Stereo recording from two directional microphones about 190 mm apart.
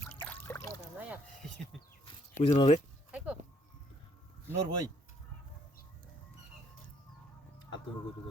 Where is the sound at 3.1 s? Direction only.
5° right (ahead or behind).